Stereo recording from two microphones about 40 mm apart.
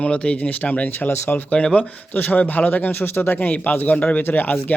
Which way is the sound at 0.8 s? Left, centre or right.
Left.